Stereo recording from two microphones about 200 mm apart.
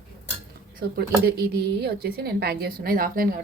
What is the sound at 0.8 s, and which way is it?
A woman's voice, 50° right (ahead or behind).